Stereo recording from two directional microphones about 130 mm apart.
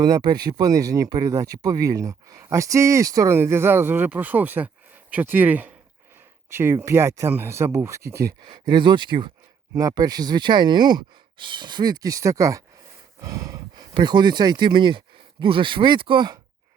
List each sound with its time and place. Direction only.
0.0 s speech: 30° right (ahead or behind)
8.4 s speech: 35° right (ahead or behind)
13.2 s a sound: 25° right (ahead or behind)
13.9 s speech: 35° right (ahead or behind)